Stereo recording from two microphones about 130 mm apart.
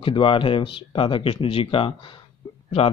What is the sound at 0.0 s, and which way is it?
Speech, 40° left (ahead or behind).